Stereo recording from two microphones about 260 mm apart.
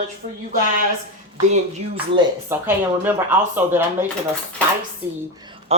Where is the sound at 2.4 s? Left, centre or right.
Centre.